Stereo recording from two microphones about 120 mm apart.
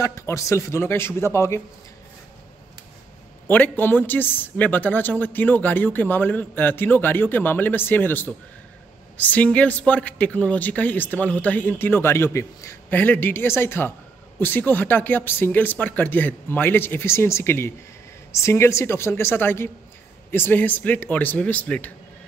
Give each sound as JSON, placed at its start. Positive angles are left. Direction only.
{"t": 0.0, "sound": "a man's voice", "side_deg": 25}
{"t": 3.4, "sound": "a man's voice", "side_deg": 15}